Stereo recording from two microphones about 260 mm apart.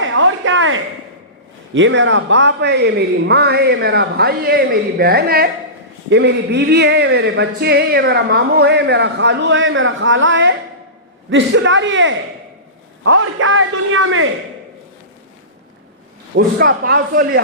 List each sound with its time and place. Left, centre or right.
0.0 s a sound: right
1.7 s a man's voice: right
16.3 s speech: right